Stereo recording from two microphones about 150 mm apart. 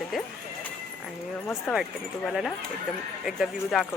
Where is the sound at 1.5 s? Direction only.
Centre (ahead or behind).